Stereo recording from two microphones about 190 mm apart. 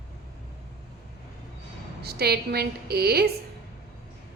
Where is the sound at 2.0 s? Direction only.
55° right (ahead or behind).